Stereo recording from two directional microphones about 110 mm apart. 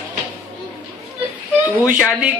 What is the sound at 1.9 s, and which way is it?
Music, 5° right (ahead or behind).